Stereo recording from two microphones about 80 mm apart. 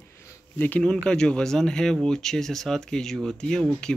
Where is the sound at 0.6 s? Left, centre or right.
Centre.